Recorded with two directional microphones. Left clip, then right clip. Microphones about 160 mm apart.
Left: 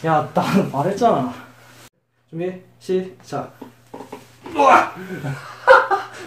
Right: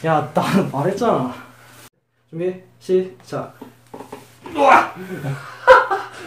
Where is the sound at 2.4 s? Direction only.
15° left (ahead or behind).